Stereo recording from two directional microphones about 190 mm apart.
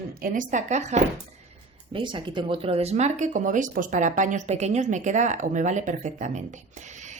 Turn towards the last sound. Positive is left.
turn(degrees=-40)  # may be behind; listen again after turning